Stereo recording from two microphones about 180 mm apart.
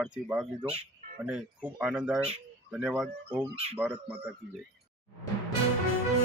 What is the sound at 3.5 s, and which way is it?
Speech, 35° right (ahead or behind).